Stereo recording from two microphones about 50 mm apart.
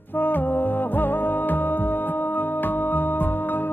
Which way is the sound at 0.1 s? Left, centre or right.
Left.